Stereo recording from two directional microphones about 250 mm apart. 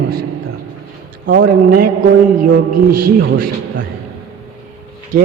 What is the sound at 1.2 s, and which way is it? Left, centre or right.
A man's voice, right.